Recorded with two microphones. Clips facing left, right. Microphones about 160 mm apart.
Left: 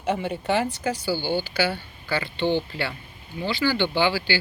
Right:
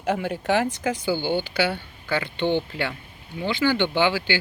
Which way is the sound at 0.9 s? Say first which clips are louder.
Right 2 dB; 20° right (ahead or behind).